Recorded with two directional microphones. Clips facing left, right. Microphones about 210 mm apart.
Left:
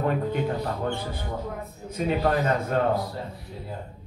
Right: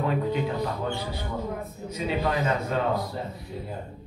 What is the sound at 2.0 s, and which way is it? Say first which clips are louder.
Speech: left 3 dB; 50° left (ahead or behind).